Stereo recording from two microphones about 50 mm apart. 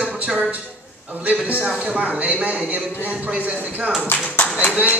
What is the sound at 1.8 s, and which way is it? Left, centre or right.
A man's voice, right.